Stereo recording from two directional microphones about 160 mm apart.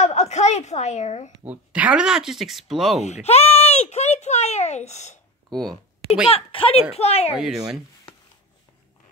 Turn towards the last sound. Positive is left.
turn(degrees=-5)  # may be behind; listen again after turning